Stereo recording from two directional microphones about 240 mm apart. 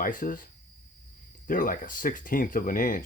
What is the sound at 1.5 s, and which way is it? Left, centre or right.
Speech, left.